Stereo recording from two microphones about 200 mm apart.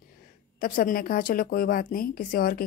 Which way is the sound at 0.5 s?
45° left (ahead or behind).